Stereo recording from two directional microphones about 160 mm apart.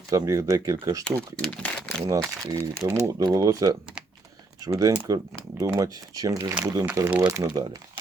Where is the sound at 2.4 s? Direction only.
20° right (ahead or behind).